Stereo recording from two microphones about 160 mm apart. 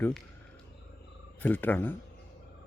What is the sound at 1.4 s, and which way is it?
Speech, 10° left (ahead or behind).